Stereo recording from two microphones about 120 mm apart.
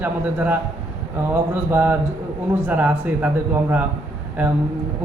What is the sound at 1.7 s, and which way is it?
A man's voice, 15° right (ahead or behind).